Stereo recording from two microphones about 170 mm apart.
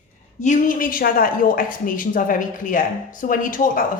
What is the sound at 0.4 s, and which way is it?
A woman's voice, 50° left (ahead or behind).